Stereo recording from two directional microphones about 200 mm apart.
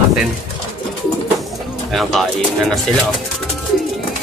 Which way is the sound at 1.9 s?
Centre (ahead or behind).